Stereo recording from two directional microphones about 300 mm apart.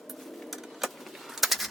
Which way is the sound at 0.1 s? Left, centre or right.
Centre.